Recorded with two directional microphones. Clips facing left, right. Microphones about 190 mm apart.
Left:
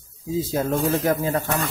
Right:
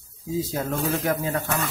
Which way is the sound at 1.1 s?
35° left (ahead or behind).